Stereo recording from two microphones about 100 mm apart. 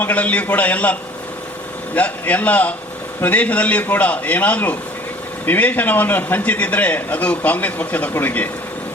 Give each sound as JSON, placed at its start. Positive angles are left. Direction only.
{"t": 0.0, "sound": "a man's voice", "side_deg": 15}
{"t": 2.0, "sound": "a man's voice", "side_deg": 15}